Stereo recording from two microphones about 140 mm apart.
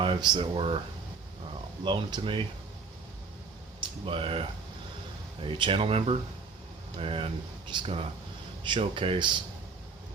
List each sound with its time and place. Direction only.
0.0 s speech: 30° right (ahead or behind)
1.8 s speech: 35° right (ahead or behind)
3.8 s speech: 40° right (ahead or behind)